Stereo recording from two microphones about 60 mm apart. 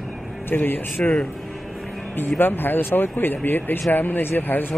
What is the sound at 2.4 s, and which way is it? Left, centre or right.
Speech, left.